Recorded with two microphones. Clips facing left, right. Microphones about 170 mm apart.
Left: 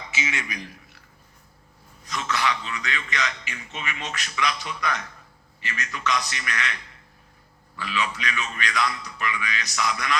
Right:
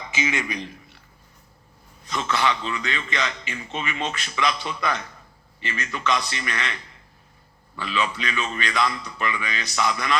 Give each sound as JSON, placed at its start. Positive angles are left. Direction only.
{"t": 0.4, "sound": "a man's voice", "side_deg": -25}
{"t": 2.0, "sound": "a man's voice", "side_deg": -25}
{"t": 7.8, "sound": "a man's voice", "side_deg": -25}